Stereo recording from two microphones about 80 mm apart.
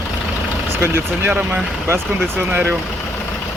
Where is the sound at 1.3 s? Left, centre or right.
Centre.